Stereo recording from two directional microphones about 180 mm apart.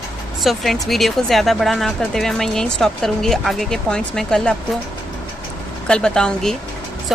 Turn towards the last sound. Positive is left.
turn(degrees=5)  # may be behind; listen again after turning